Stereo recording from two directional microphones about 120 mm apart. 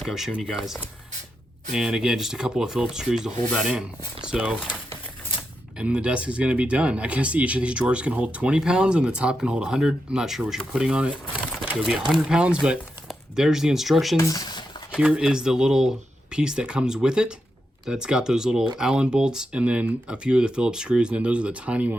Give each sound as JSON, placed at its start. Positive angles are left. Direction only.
{"t": 0.0, "sound": "speech", "side_deg": -5}
{"t": 14.2, "sound": "speech", "side_deg": 30}
{"t": 14.9, "sound": "speech", "side_deg": -5}